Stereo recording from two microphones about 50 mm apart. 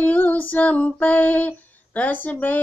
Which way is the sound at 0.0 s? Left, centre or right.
Left.